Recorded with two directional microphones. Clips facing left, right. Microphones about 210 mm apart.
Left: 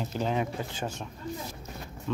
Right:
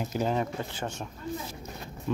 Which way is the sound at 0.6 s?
10° left (ahead or behind).